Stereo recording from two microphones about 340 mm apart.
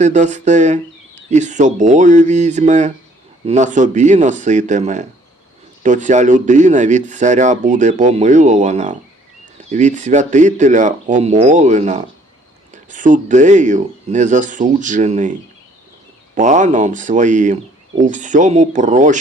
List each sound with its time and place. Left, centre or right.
0.0 s speech: right